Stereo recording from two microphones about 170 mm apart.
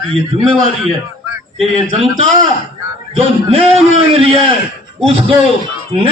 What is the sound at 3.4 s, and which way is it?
A man's voice, 35° right (ahead or behind).